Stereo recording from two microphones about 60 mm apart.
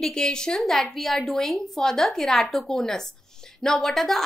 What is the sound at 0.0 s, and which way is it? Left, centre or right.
A woman's voice, centre.